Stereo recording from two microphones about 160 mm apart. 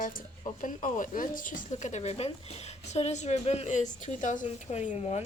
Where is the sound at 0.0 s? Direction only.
60° left (ahead or behind).